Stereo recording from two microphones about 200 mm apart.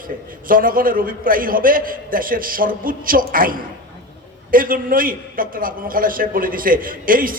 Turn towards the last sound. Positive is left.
turn(degrees=-45)  # may be behind; listen again after turning